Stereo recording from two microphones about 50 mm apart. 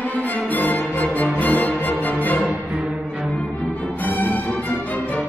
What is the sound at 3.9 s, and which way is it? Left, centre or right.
Music, left.